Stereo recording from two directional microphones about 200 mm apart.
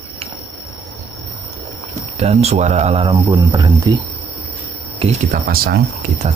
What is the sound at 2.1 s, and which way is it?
Speech, 35° right (ahead or behind).